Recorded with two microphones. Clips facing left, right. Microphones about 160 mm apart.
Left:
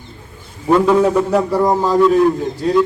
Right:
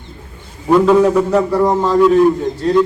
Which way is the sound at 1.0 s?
10° left (ahead or behind).